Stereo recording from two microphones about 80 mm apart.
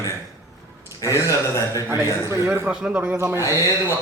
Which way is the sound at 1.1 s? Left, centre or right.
Left.